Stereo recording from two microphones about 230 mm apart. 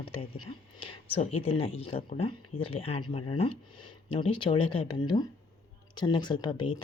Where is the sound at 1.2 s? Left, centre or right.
Left.